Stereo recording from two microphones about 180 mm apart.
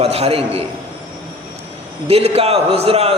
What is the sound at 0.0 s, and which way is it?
Speech, 35° right (ahead or behind).